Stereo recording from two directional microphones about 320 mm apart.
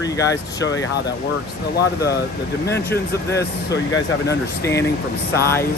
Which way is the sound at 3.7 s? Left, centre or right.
Left.